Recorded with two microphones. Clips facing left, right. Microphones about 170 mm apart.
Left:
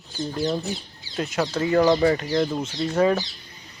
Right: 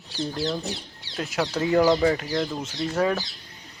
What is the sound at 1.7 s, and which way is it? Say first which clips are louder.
Speech: left 1 dB; centre (ahead or behind).